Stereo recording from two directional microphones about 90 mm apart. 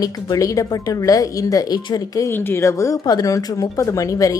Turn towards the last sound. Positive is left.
turn(degrees=40)  # may be behind; listen again after turning